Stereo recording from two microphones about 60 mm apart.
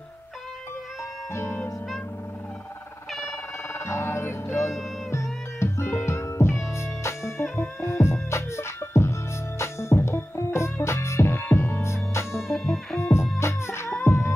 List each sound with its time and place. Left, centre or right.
1.3 s music: left
3.8 s music: left
12.4 s music: centre
13.0 s music: left